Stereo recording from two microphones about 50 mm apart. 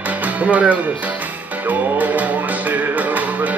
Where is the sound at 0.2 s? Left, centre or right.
Right.